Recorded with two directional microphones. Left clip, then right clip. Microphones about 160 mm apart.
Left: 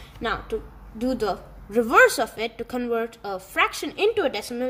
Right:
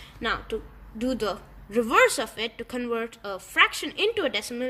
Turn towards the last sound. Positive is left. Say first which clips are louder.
# left 2 dB
turn(degrees=20)  # may be behind; listen again after turning